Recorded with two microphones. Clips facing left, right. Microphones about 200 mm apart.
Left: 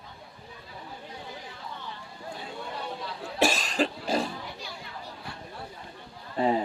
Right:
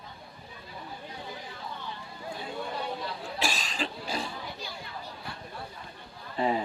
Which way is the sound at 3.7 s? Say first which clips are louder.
Left 7 dB; 45° left (ahead or behind).